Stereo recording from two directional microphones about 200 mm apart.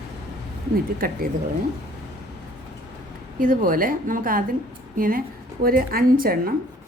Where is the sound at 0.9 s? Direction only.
45° right (ahead or behind).